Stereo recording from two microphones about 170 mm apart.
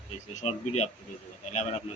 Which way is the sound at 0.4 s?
40° left (ahead or behind).